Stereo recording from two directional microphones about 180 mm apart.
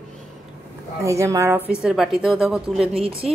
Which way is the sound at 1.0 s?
15° right (ahead or behind).